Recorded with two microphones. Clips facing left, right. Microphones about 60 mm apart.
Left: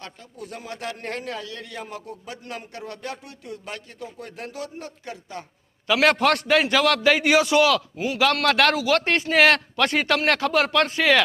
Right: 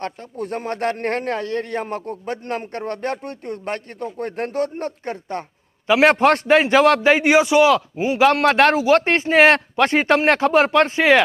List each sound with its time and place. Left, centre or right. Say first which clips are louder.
0.0 s a man's voice: right 11 dB; right
5.9 s a man's voice: right 5 dB; right